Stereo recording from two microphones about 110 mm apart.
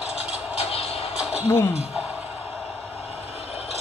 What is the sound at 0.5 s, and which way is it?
Music, 65° left (ahead or behind).